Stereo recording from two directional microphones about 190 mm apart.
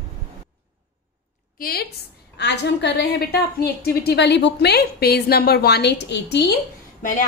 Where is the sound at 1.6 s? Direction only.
55° left (ahead or behind).